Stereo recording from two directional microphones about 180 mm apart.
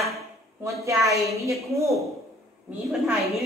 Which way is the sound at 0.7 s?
15° right (ahead or behind).